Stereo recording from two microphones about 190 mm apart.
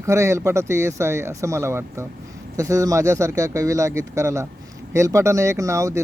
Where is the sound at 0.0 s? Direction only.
15° right (ahead or behind).